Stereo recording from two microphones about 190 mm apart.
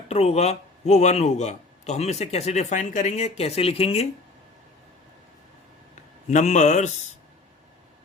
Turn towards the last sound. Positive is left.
turn(degrees=40)  # may be behind; listen again after turning